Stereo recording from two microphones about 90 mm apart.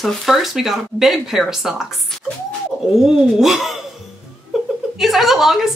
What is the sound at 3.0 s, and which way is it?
Speech, 5° right (ahead or behind).